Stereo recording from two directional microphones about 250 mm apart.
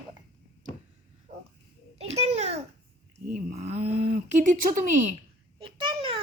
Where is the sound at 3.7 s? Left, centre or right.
Right.